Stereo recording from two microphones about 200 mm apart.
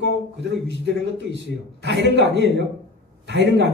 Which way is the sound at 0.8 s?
60° right (ahead or behind).